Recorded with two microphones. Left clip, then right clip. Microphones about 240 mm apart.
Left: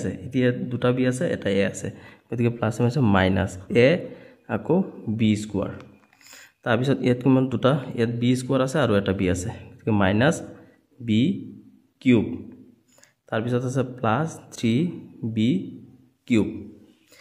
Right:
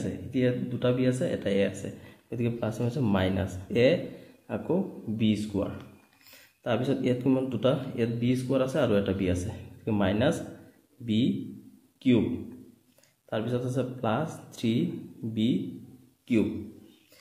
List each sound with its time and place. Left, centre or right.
0.0 s a man's voice: left
13.3 s speech: left
16.3 s a man's voice: left